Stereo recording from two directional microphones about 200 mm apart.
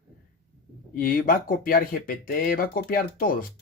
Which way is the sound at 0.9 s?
45° left (ahead or behind).